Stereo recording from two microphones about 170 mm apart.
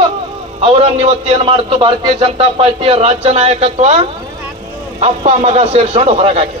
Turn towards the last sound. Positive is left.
turn(degrees=-40)  # may be behind; listen again after turning